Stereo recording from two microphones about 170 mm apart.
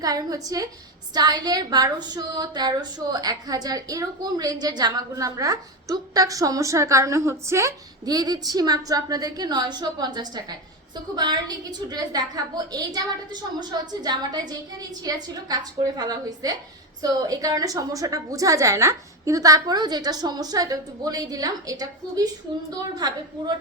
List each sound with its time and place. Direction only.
0.0 s a woman's voice: 20° right (ahead or behind)